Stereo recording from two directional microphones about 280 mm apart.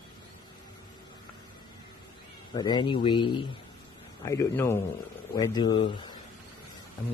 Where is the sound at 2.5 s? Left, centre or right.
Centre.